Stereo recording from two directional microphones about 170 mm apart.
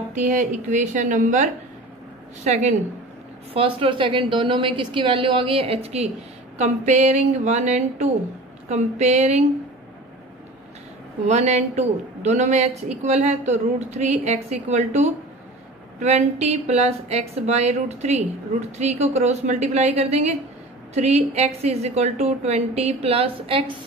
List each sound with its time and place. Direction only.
0.1 s a woman's voice: 45° right (ahead or behind)
3.5 s a woman's voice: 30° right (ahead or behind)
11.2 s a woman's voice: 40° right (ahead or behind)